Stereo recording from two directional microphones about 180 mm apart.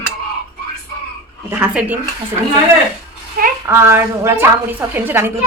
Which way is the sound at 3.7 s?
15° right (ahead or behind).